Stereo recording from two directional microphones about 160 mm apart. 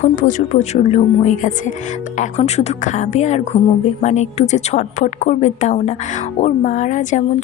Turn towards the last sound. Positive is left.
turn(degrees=50)  # may be behind; listen again after turning